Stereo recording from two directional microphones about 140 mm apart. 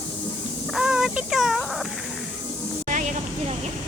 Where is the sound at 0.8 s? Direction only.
5° right (ahead or behind).